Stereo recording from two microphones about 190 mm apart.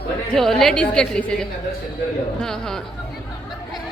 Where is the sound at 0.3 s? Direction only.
Centre (ahead or behind).